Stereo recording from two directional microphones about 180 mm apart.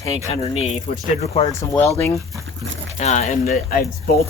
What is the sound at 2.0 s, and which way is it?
Speech, 15° left (ahead or behind).